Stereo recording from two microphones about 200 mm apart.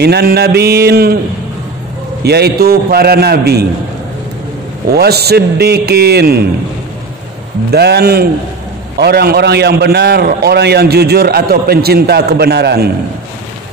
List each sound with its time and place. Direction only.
0.0 s a man's voice: 55° right (ahead or behind)
2.2 s a man's voice: 55° right (ahead or behind)
4.9 s a man's voice: 55° right (ahead or behind)
7.7 s a man's voice: 55° right (ahead or behind)